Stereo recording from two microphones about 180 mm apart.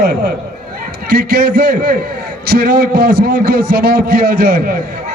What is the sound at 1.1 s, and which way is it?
A man's voice, 60° right (ahead or behind).